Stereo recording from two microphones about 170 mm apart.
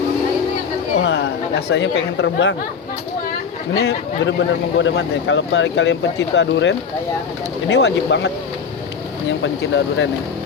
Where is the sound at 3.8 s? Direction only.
90° left.